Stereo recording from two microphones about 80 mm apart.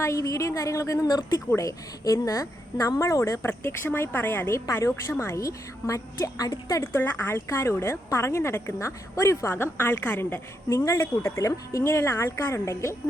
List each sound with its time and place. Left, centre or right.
0.0 s a woman's voice: left
1.0 s speech: left
1.5 s a woman's voice: left
6.8 s a woman's voice: left
10.7 s a woman's voice: left